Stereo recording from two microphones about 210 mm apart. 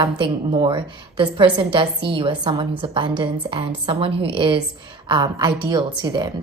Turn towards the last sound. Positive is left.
turn(degrees=-20)  # may be behind; listen again after turning